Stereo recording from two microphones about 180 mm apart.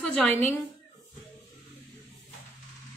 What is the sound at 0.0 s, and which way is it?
Speech, 10° left (ahead or behind).